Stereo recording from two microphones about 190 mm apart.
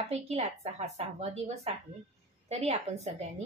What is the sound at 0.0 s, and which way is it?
A woman's voice, 35° right (ahead or behind).